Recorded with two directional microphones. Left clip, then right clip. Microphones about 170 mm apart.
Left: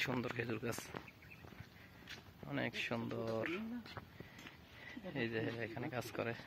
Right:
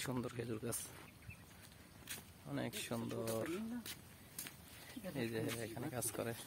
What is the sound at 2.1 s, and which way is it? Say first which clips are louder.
Speech: left 2 dB; centre (ahead or behind).